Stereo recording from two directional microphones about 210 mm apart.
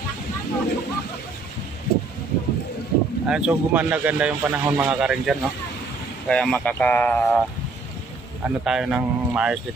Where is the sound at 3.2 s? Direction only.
5° right (ahead or behind).